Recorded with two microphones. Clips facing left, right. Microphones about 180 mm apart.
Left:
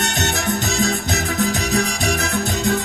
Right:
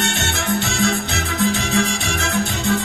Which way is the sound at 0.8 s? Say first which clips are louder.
Even; 40° left (ahead or behind).